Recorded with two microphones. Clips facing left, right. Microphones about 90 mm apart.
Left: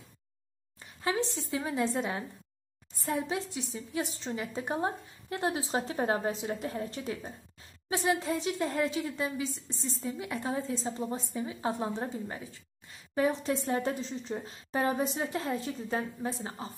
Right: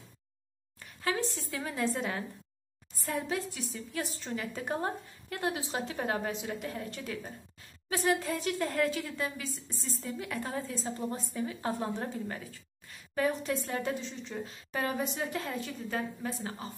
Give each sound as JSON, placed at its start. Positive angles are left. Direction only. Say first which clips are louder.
{"t": 0.7, "sound": "a woman's voice", "louder": "left 2 dB", "side_deg": 20}